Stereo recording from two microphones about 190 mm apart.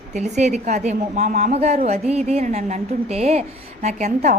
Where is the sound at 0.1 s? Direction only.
35° right (ahead or behind).